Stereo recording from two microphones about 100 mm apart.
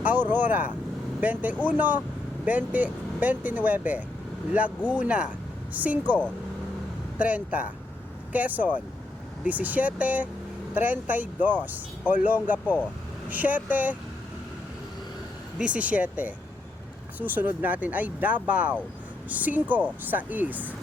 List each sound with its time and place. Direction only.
0.0 s speech: 20° right (ahead or behind)
7.2 s speech: 15° right (ahead or behind)
15.5 s speech: 10° right (ahead or behind)